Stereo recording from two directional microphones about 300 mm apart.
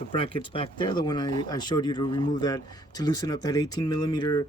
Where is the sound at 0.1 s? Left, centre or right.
Centre.